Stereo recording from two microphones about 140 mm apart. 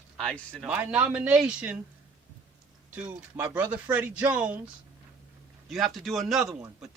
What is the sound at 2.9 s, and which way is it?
Speech, 10° right (ahead or behind).